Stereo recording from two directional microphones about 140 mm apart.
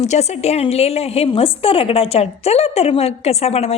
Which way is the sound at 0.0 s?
50° left (ahead or behind).